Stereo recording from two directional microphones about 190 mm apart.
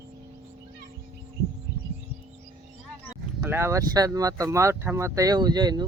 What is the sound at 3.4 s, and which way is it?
Speech, 15° right (ahead or behind).